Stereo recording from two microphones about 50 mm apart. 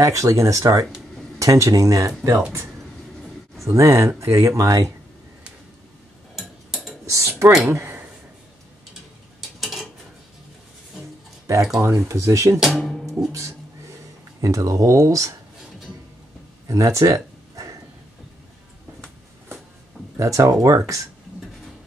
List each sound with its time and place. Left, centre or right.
0.0 s speech: right
3.6 s speech: right
6.3 s tick-tock: centre
7.1 s speech: right
7.7 s a sound: right
9.6 s dishes: centre
11.8 s speech: right
12.6 s speech: centre
14.4 s speech: right
16.6 s speech: right
17.6 s a sound: right
20.2 s speech: right